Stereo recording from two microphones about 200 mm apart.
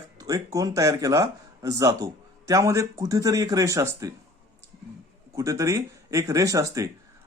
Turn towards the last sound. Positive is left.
turn(degrees=-15)  # may be behind; listen again after turning